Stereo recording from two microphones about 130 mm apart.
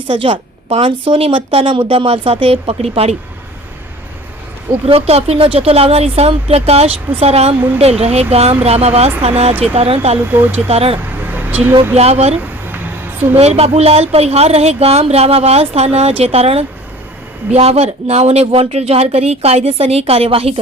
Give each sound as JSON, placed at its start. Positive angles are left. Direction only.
{"t": 0.1, "sound": "speech", "side_deg": -45}
{"t": 4.9, "sound": "speech", "side_deg": -50}
{"t": 10.2, "sound": "speech", "side_deg": -15}
{"t": 10.7, "sound": "speech", "side_deg": -50}
{"t": 10.9, "sound": "vehicle", "side_deg": -15}
{"t": 11.9, "sound": "speech", "side_deg": -55}
{"t": 12.4, "sound": "a sound", "side_deg": -15}
{"t": 13.3, "sound": "speech", "side_deg": -50}